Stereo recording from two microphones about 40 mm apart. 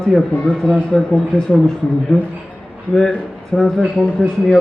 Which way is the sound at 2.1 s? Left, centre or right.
Left.